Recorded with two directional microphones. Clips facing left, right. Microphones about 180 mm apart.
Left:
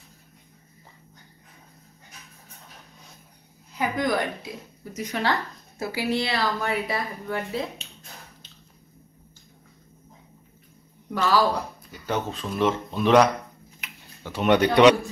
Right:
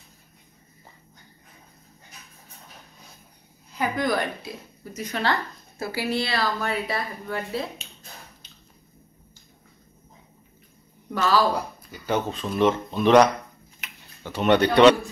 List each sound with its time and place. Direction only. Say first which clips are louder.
3.7 s a woman's voice: even; 15° left (ahead or behind)
11.1 s a woman's voice: even; 10° left (ahead or behind)
11.5 s speech: right 1 dB; centre (ahead or behind)
13.7 s tick-tock: left 1 dB; 5° left (ahead or behind)